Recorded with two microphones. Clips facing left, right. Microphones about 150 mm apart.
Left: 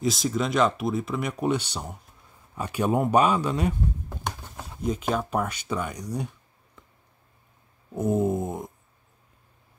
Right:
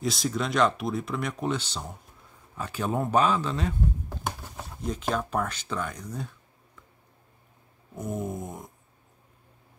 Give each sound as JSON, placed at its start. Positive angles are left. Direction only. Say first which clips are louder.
{"t": 0.0, "sound": "speech", "louder": "left 3 dB", "side_deg": 0}
{"t": 4.8, "sound": "speech", "louder": "left 3 dB", "side_deg": 5}
{"t": 7.9, "sound": "a sound", "louder": "left 9 dB", "side_deg": 25}